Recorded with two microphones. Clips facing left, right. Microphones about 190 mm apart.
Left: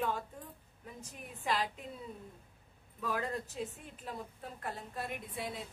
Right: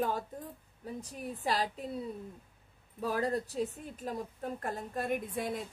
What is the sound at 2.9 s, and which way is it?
A woman's voice, 35° right (ahead or behind).